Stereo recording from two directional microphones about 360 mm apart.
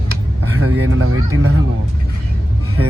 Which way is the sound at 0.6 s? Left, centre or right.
Right.